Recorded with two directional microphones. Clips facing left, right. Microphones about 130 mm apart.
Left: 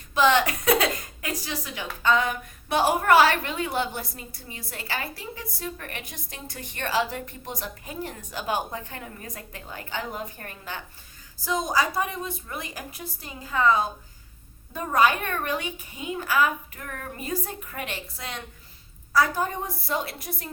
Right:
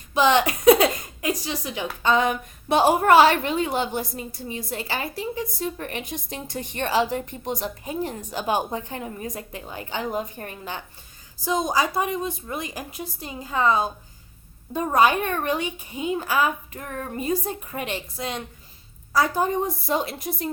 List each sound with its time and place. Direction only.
0.1 s a woman's voice: 20° right (ahead or behind)